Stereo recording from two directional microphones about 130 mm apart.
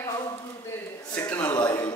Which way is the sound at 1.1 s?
10° left (ahead or behind).